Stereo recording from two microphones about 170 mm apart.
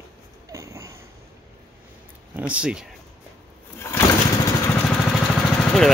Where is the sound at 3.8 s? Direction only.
15° left (ahead or behind).